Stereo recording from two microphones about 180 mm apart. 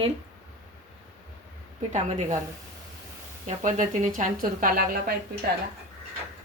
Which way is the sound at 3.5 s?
45° right (ahead or behind).